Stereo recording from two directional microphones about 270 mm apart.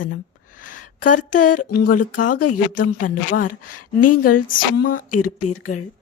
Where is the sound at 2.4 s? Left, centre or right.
Left.